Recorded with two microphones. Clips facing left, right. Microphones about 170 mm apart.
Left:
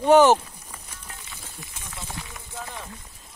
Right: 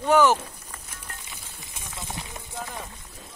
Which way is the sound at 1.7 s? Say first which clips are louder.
Right 3 dB; 20° right (ahead or behind).